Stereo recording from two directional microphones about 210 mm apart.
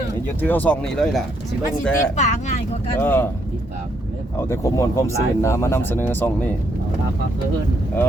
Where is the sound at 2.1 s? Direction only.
35° left (ahead or behind).